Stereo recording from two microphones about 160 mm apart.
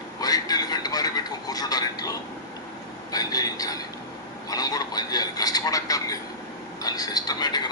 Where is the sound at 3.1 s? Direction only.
25° left (ahead or behind).